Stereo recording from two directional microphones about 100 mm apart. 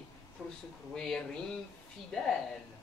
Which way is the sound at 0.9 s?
5° left (ahead or behind).